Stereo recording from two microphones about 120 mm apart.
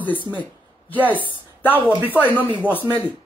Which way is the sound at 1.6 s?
15° left (ahead or behind).